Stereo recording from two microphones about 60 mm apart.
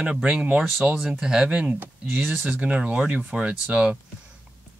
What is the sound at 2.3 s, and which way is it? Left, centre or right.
Speech, right.